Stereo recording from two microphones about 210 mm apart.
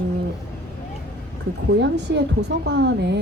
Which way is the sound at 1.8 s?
55° right (ahead or behind).